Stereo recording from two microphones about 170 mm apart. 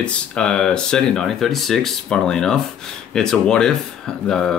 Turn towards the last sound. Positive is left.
turn(degrees=5)  # may be behind; listen again after turning